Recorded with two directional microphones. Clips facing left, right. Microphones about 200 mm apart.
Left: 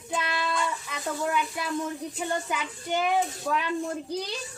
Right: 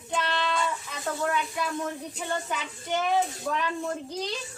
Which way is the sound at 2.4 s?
10° left (ahead or behind).